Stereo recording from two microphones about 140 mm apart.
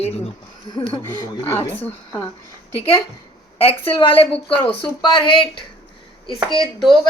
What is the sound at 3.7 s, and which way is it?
Speech, 45° left (ahead or behind).